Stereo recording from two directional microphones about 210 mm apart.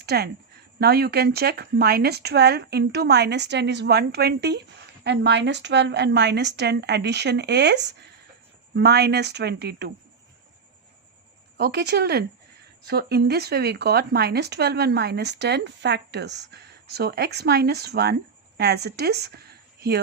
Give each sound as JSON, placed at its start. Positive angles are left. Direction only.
{"t": 0.0, "sound": "a woman's voice", "side_deg": -50}
{"t": 11.5, "sound": "speech", "side_deg": -50}